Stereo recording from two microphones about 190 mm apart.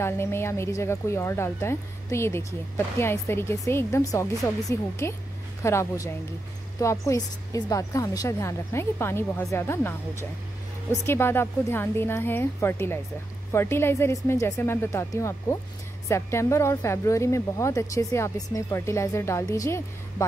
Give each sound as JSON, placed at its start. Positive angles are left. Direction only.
{"t": 0.0, "sound": "speech", "side_deg": 15}